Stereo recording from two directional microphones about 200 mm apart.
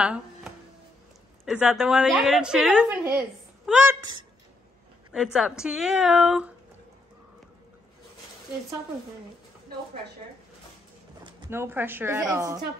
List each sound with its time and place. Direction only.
0.0 s a woman's voice: 5° right (ahead or behind)
3.6 s a sound: 5° right (ahead or behind)
4.0 s speech: 20° right (ahead or behind)
5.1 s a woman's voice: centre (ahead or behind)
11.5 s a woman's voice: 10° right (ahead or behind)